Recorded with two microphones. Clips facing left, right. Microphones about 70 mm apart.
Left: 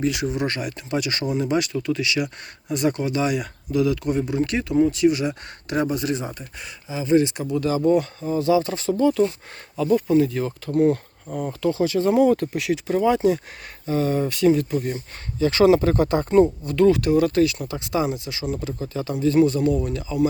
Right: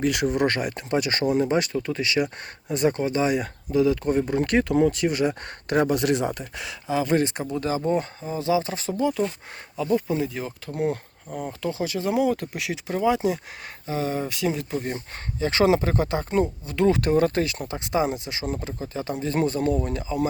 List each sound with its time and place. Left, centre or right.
0.0 s speech: right
4.9 s speech: right
7.5 s speech: right
11.3 s speech: centre
12.9 s speech: centre
13.1 s speech: centre
16.3 s speech: centre
16.7 s speech: right
17.0 s speech: right